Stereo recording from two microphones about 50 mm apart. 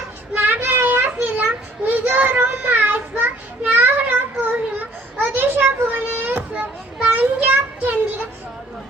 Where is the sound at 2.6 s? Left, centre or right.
Right.